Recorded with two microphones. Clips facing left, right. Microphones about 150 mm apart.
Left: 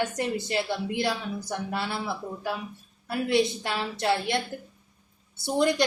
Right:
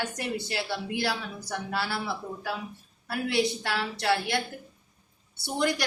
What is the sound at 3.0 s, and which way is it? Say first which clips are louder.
Speech: left 3 dB; 20° left (ahead or behind).